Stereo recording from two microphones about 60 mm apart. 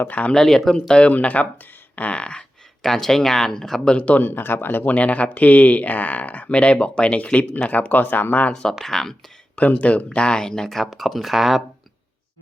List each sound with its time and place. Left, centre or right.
0.1 s speech: left
0.3 s speech: centre
2.8 s speech: centre
3.9 s speech: left
4.3 s speech: left
4.9 s speech: left
8.8 s speech: centre
9.6 s speech: left; by 11.6 s centre